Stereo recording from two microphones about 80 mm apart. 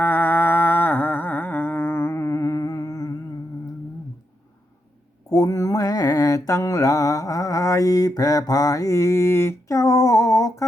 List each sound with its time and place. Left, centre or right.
0.0 s music: left
5.3 s mantra: left